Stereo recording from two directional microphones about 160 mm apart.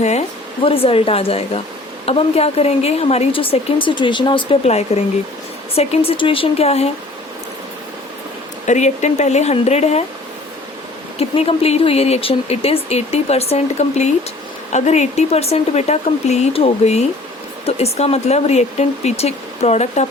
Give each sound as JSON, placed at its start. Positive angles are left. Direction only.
{"t": 0.0, "sound": "speech", "side_deg": 45}
{"t": 8.6, "sound": "speech", "side_deg": 50}
{"t": 11.2, "sound": "speech", "side_deg": 40}